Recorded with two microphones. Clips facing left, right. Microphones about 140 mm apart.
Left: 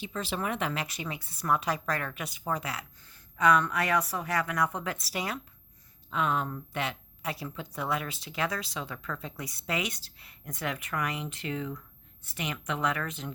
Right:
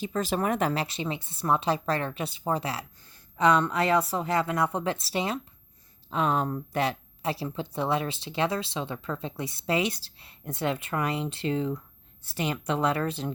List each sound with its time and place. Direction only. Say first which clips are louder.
0.0 s a woman's voice: right 6 dB; 45° right (ahead or behind)